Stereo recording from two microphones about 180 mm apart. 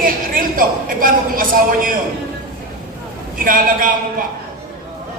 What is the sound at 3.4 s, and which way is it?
Speech, 50° right (ahead or behind).